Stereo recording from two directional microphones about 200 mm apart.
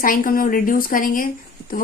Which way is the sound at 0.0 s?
45° left (ahead or behind).